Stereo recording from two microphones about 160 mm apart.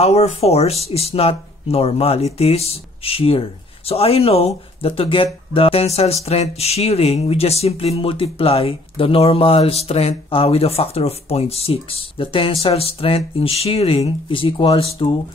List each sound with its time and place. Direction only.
0.0 s speech: 40° left (ahead or behind)